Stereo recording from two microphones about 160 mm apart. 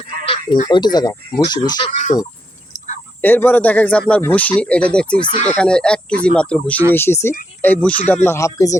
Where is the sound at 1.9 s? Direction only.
55° left (ahead or behind).